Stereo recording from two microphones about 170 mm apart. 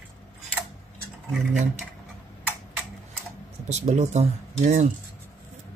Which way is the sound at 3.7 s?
40° right (ahead or behind).